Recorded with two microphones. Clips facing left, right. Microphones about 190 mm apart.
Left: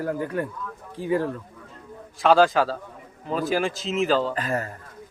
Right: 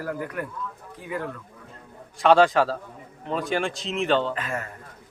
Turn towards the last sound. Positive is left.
turn(degrees=35)  # may be behind; listen again after turning